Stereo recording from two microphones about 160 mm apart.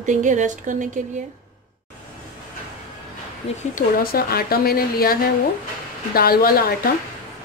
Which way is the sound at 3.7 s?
65° left (ahead or behind).